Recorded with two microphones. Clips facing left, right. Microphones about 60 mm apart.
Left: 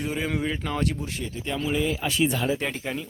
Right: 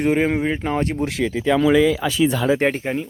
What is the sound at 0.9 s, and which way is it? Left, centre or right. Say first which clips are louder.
Speech: right 11 dB; right.